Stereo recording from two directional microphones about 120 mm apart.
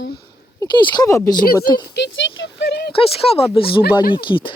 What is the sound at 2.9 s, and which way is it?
Speech, 50° left (ahead or behind).